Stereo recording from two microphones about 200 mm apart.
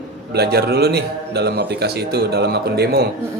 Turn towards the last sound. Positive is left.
turn(degrees=-50)  # may be behind; listen again after turning